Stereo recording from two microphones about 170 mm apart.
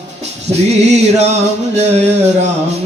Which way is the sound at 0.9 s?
40° right (ahead or behind).